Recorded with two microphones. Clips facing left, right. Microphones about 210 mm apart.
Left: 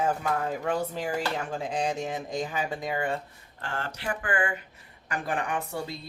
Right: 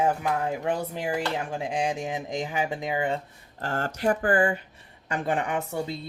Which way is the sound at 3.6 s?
40° right (ahead or behind).